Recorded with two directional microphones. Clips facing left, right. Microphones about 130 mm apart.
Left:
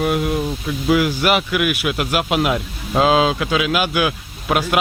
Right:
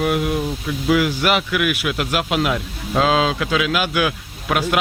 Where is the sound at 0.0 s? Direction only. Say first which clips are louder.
Left 1 dB; centre (ahead or behind).